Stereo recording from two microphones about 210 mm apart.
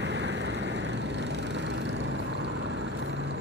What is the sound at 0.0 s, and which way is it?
Vehicle, 55° right (ahead or behind).